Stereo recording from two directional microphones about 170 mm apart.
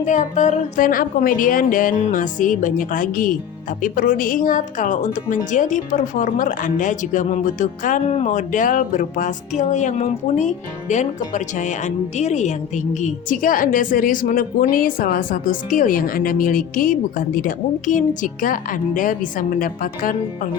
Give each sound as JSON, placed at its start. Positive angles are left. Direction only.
{"t": 0.0, "sound": "speech", "side_deg": 45}